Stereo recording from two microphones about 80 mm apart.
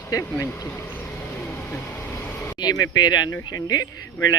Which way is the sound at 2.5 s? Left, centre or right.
Left.